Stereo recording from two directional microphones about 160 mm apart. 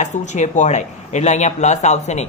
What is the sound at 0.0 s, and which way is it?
Speech, 50° left (ahead or behind).